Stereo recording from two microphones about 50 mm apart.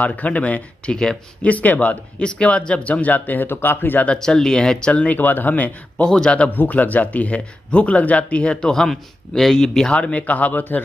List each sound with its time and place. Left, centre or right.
0.0 s speech: left
2.1 s speech: left
4.2 s speech: centre
4.9 s speech: left
6.0 s speech: centre
6.5 s speech: left; by 9.9 s centre
9.9 s speech: left